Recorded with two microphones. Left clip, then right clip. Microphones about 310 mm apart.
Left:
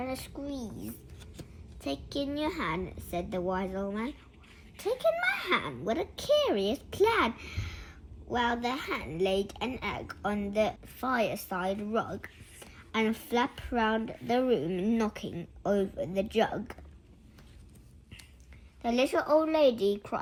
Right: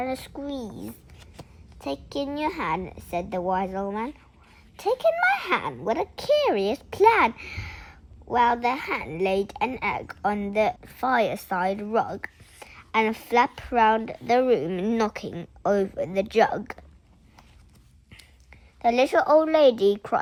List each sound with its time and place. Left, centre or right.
0.0 s a woman's voice: right
5.1 s a woman's voice: right
18.8 s a woman's voice: right